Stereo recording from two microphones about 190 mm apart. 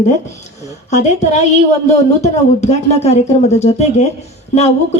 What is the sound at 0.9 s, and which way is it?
A woman's voice, 35° left (ahead or behind).